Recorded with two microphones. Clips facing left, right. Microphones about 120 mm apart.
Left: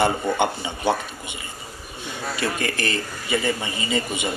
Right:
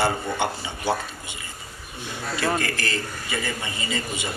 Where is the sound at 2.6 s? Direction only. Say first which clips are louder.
Left 2 dB; 20° left (ahead or behind).